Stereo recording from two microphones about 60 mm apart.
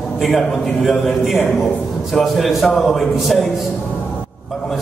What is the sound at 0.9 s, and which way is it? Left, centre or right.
A man's voice, centre.